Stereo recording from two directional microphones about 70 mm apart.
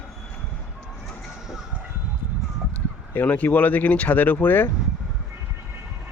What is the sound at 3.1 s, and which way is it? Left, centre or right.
Speech, left.